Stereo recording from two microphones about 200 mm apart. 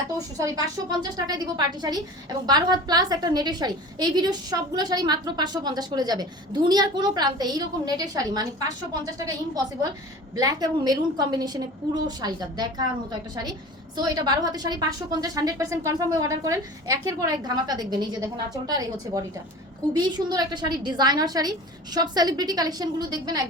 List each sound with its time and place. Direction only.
0.3 s a woman's voice: 20° right (ahead or behind)
10.3 s a woman's voice: 20° right (ahead or behind)